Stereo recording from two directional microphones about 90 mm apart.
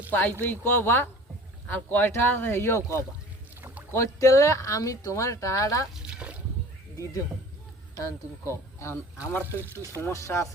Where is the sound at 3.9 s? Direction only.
35° left (ahead or behind).